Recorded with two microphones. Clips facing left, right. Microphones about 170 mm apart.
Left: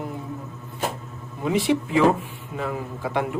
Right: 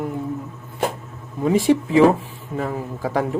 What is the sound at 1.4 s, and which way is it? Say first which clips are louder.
A woman's voice: right 5 dB; 45° right (ahead or behind).